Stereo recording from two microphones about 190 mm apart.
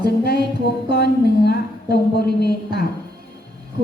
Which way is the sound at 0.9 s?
60° left (ahead or behind).